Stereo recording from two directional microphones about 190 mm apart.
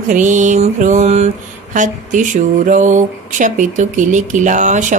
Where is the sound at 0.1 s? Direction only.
40° right (ahead or behind).